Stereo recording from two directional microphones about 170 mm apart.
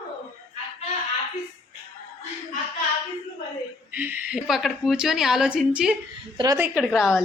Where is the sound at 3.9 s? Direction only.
10° right (ahead or behind).